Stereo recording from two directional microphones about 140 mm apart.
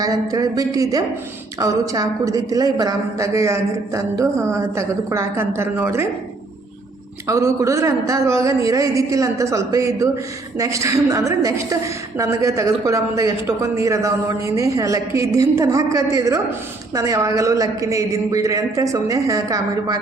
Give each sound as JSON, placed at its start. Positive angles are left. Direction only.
{"t": 0.0, "sound": "a woman's voice", "side_deg": -25}
{"t": 7.3, "sound": "a woman's voice", "side_deg": -20}